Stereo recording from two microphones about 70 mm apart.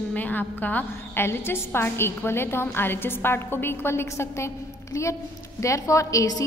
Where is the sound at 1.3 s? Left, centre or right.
Left.